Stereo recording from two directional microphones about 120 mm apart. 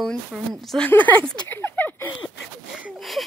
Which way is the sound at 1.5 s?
15° left (ahead or behind).